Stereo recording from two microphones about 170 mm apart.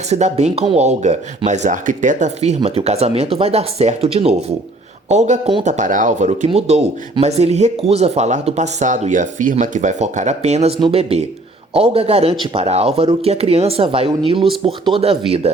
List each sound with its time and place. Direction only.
0.1 s speech: 40° right (ahead or behind)